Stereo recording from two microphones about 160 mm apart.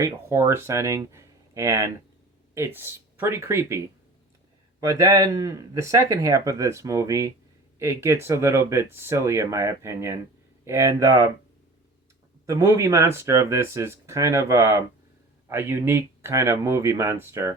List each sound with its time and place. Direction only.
0.0 s speech: 15° right (ahead or behind)
12.5 s speech: 20° right (ahead or behind)